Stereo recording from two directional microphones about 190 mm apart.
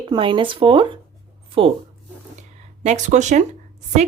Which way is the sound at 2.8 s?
40° right (ahead or behind).